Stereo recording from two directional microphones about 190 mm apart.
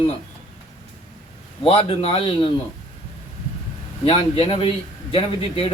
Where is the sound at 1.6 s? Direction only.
30° left (ahead or behind).